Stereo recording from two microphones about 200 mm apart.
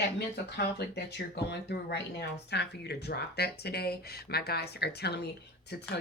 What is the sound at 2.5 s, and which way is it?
Speech, 55° left (ahead or behind).